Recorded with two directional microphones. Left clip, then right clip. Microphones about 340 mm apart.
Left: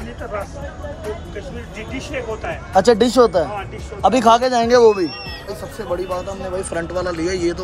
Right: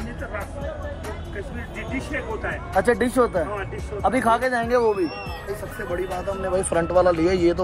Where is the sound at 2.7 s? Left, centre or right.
Left.